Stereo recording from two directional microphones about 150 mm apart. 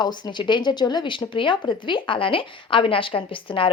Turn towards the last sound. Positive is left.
turn(degrees=35)  # may be behind; listen again after turning